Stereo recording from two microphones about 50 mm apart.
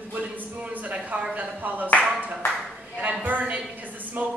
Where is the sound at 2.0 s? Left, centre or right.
Right.